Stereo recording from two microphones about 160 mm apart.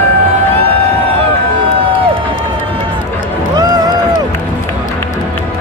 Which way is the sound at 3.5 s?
25° right (ahead or behind).